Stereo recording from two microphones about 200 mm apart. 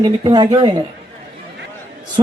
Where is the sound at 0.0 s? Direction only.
20° right (ahead or behind).